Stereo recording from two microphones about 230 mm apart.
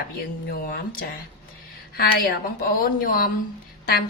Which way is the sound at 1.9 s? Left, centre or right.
Left.